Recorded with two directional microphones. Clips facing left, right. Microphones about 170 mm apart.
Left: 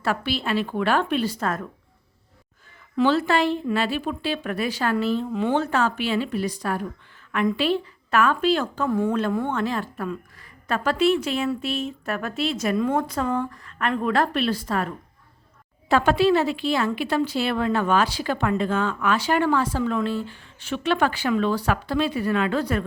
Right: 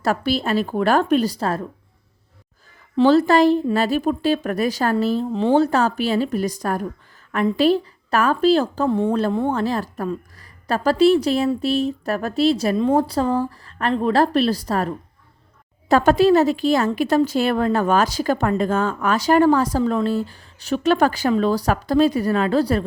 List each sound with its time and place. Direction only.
0.0 s a woman's voice: 40° right (ahead or behind)
2.9 s a woman's voice: 35° right (ahead or behind)